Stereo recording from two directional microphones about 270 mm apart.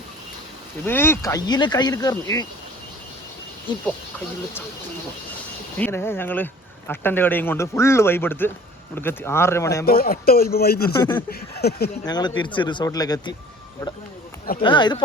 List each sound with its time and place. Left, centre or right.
0.9 s speech: centre
5.7 s speech: centre
9.8 s speech: left
12.0 s speech: centre
14.6 s speech: centre